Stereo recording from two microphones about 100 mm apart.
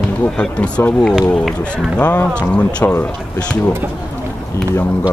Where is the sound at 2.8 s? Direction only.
25° left (ahead or behind).